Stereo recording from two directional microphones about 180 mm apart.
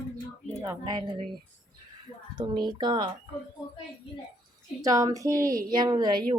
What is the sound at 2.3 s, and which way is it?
Speech, 25° right (ahead or behind).